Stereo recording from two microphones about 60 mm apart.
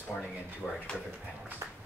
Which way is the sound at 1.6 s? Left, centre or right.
Right.